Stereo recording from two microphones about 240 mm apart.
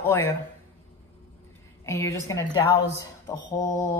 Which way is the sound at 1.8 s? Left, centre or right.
Centre.